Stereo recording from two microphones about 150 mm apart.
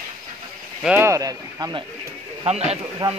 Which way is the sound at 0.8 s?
15° right (ahead or behind).